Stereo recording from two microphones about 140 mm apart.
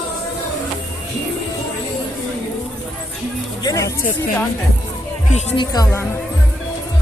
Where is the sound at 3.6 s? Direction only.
20° left (ahead or behind).